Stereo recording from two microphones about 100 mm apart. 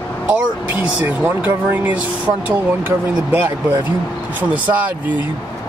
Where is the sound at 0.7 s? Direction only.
20° right (ahead or behind).